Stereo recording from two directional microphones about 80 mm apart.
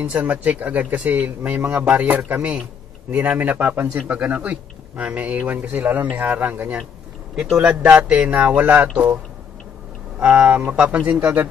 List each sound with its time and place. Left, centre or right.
0.0 s speech: centre
7.3 s speech: centre
10.2 s speech: centre